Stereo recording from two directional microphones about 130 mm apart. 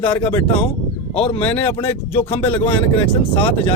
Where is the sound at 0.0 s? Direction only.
40° left (ahead or behind).